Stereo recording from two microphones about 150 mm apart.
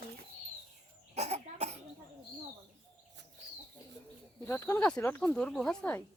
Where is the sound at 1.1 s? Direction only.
45° right (ahead or behind).